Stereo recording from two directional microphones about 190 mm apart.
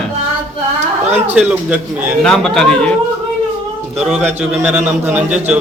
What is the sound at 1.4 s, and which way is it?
A man's voice, 5° right (ahead or behind).